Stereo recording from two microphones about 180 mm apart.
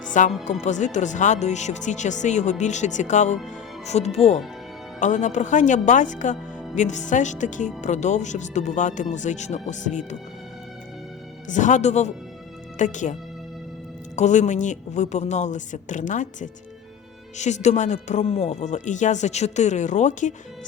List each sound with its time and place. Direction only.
0.1 s speech: 45° left (ahead or behind)
11.4 s speech: 45° left (ahead or behind)
14.2 s speech: 40° left (ahead or behind)